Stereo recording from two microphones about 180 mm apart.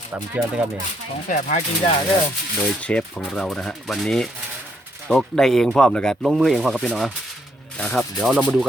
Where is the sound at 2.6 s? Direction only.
5° left (ahead or behind).